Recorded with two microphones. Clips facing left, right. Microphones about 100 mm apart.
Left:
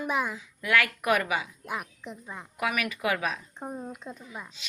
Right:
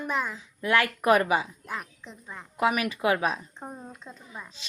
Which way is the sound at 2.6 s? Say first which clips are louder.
Right 4 dB; 30° right (ahead or behind).